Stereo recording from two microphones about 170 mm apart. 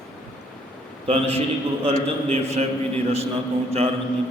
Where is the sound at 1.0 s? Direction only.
35° right (ahead or behind).